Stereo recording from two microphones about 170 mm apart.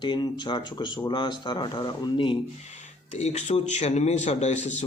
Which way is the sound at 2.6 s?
40° left (ahead or behind).